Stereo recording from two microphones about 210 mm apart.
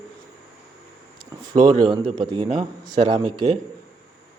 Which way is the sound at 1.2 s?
20° right (ahead or behind).